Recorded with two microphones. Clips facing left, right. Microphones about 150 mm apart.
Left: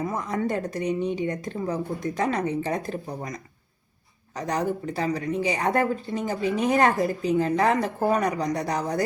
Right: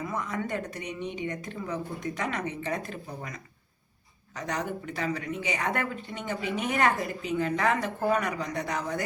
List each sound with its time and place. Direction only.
0.0 s speech: 35° left (ahead or behind)